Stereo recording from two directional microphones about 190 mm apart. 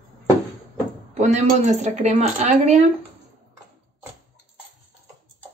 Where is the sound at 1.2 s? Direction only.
35° right (ahead or behind).